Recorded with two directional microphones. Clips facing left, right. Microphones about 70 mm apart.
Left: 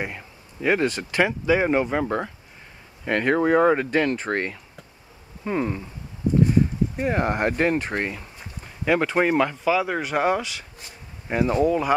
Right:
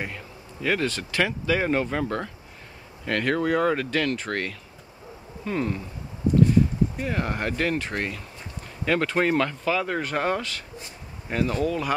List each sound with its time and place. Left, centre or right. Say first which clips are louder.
0.0 s speech: left 2 dB; centre